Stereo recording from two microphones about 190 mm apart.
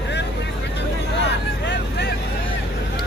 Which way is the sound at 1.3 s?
65° left (ahead or behind).